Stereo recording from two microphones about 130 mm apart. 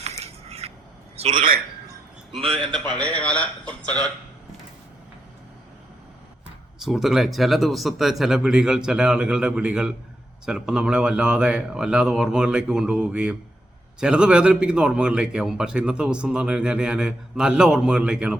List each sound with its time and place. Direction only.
0.4 s a sound: 55° right (ahead or behind)
2.4 s a man's voice: 45° right (ahead or behind)
3.0 s speech: 10° left (ahead or behind)
6.7 s a man's voice: 5° right (ahead or behind)